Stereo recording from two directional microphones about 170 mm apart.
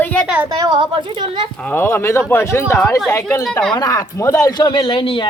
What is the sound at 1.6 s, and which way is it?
A woman's voice, 10° left (ahead or behind).